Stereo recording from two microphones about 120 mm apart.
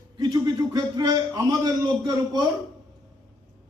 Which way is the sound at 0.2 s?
35° right (ahead or behind).